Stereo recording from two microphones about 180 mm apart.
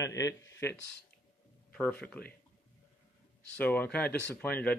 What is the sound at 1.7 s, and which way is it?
Speech, 5° left (ahead or behind).